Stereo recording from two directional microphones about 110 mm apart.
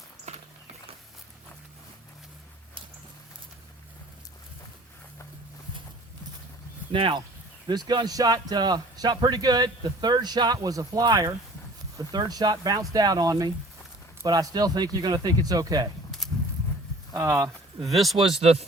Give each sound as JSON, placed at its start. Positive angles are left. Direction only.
{"t": 0.3, "sound": "walk", "side_deg": -90}
{"t": 6.9, "sound": "speech", "side_deg": -55}
{"t": 7.7, "sound": "speech", "side_deg": -40}
{"t": 16.2, "sound": "horse", "side_deg": 0}
{"t": 17.2, "sound": "speech", "side_deg": -25}
{"t": 17.8, "sound": "speech", "side_deg": 0}